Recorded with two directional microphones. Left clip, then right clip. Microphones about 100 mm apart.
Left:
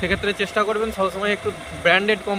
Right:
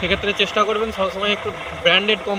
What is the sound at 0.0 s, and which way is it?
Speech, 25° left (ahead or behind).